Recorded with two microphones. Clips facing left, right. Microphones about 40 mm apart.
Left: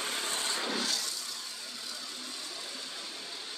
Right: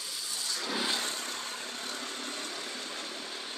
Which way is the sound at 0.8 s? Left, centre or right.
Right.